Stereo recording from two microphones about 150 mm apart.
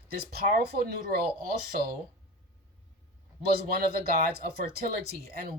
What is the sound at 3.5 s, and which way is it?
Speech, 80° right.